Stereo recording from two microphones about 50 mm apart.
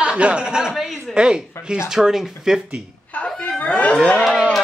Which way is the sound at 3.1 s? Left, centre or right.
Left.